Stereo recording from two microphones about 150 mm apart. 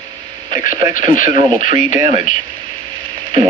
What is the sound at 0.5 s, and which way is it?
Speech, 60° left (ahead or behind).